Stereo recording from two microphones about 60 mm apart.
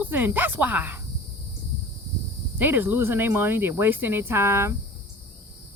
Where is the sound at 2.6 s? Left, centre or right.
Right.